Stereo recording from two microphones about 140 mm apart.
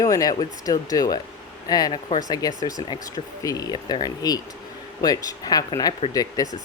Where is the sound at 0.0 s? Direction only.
25° left (ahead or behind).